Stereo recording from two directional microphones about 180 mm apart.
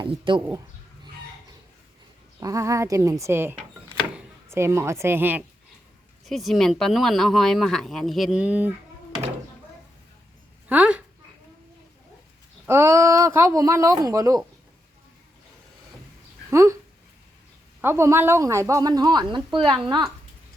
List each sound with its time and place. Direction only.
0.0 s speech: 25° right (ahead or behind)
2.4 s a woman's voice: 15° right (ahead or behind)
6.2 s speech: centre (ahead or behind)
10.7 s dog: 10° right (ahead or behind)
12.6 s a woman's voice: 15° right (ahead or behind)
16.5 s speech: 15° right (ahead or behind)
17.7 s a woman's voice: 15° right (ahead or behind)